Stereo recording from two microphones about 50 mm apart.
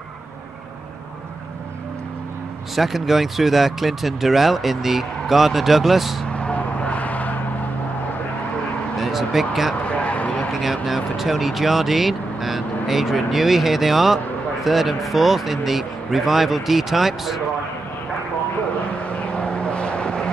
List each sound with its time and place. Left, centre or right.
2.7 s speech: centre
6.3 s vehicle: left
8.9 s speech: centre
9.8 s a sound: left
10.6 s speech: centre
18.9 s vehicle: left